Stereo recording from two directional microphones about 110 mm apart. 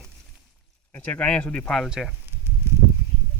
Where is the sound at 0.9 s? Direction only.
15° left (ahead or behind).